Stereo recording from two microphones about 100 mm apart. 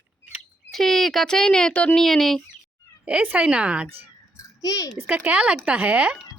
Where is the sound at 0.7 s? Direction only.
5° left (ahead or behind).